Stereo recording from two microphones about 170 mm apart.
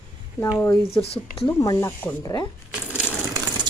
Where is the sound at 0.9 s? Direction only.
35° left (ahead or behind).